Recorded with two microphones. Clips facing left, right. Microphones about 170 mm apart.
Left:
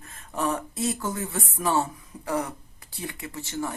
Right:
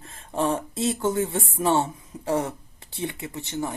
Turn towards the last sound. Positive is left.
turn(degrees=-20)  # may be behind; listen again after turning